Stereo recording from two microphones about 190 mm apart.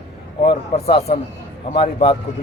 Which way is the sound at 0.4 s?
30° left (ahead or behind).